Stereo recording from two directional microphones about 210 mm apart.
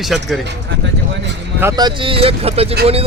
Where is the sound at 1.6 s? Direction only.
15° right (ahead or behind).